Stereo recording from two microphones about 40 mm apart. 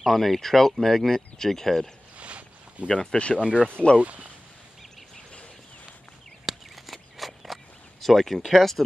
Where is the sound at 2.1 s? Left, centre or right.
Right.